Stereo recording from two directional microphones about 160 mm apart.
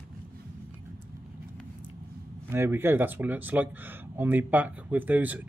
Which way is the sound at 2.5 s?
15° right (ahead or behind).